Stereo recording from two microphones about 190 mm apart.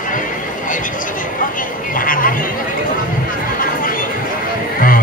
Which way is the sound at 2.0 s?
45° left (ahead or behind).